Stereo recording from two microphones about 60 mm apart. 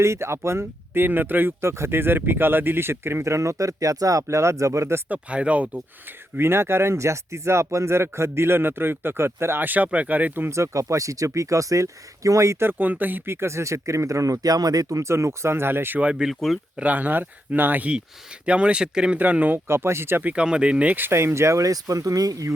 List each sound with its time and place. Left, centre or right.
0.0 s speech: right
1.6 s speech: right
5.0 s speech: right
6.3 s speech: right
9.6 s speech: right
10.5 s speech: right
12.6 s speech: right
13.3 s speech: right
16.3 s speech: centre
16.7 s speech: right
19.2 s speech: right
19.6 s speech: right
20.2 s speech: centre
21.1 s speech: right